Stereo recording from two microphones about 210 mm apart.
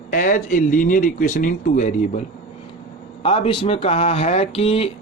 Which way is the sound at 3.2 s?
25° left (ahead or behind).